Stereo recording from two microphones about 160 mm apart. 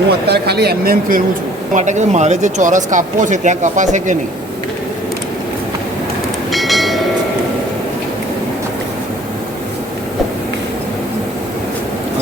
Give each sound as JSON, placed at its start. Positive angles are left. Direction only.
{"t": 0.3, "sound": "speech", "side_deg": -90}
{"t": 1.7, "sound": "speech", "side_deg": -50}
{"t": 6.5, "sound": "train", "side_deg": 0}